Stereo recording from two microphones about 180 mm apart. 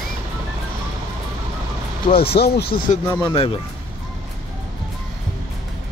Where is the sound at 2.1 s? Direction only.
60° left (ahead or behind).